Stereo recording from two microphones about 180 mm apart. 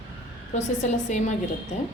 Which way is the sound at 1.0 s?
40° left (ahead or behind).